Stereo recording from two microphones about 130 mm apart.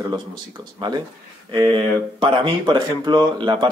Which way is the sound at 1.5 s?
40° right (ahead or behind).